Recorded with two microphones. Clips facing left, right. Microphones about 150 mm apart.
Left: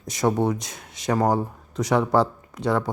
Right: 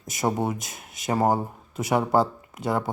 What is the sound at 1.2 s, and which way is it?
Speech, 25° right (ahead or behind).